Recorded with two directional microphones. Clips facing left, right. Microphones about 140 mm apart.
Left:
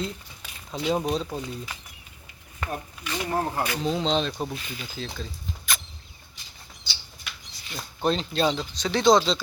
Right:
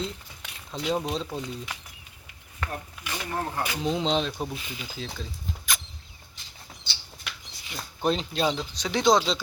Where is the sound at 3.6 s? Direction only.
15° right (ahead or behind).